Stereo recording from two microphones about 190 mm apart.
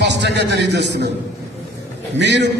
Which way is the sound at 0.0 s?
65° right (ahead or behind).